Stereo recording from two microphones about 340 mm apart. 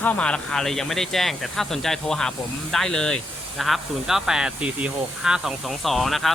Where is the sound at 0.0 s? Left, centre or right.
Centre.